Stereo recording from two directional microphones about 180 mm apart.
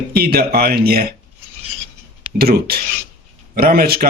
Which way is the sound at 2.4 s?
60° right (ahead or behind).